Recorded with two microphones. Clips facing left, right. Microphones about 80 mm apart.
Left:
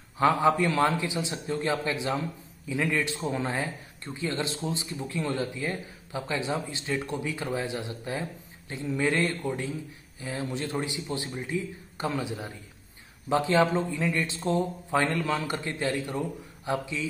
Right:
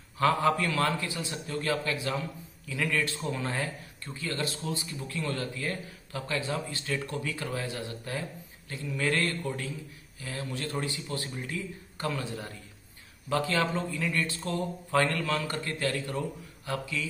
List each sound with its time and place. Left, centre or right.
0.2 s speech: centre